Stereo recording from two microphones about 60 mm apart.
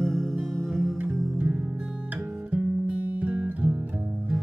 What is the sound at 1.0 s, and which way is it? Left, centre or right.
Music, right.